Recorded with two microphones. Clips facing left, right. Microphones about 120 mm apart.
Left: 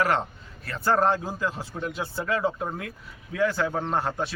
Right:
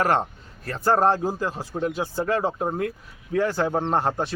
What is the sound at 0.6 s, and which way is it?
Speech, 40° right (ahead or behind).